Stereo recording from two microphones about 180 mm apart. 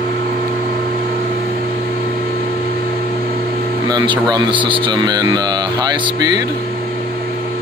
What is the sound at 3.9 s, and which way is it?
Speech, 25° right (ahead or behind).